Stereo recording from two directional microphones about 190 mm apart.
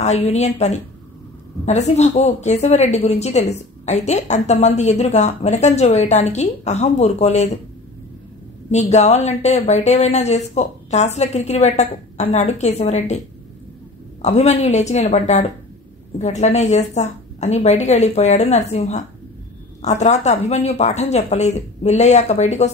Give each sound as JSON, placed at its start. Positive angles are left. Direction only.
{"t": 0.0, "sound": "a woman's voice", "side_deg": 35}
{"t": 1.7, "sound": "a woman's voice", "side_deg": 35}
{"t": 8.6, "sound": "a woman's voice", "side_deg": 35}
{"t": 14.2, "sound": "a woman's voice", "side_deg": 35}